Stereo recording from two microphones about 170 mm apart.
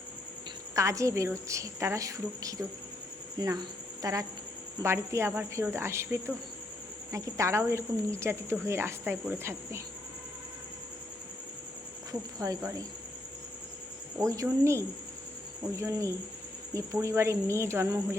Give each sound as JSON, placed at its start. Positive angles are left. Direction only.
{"t": 0.8, "sound": "a woman's voice", "side_deg": -20}
{"t": 12.4, "sound": "speech", "side_deg": -20}
{"t": 14.2, "sound": "a woman's voice", "side_deg": -20}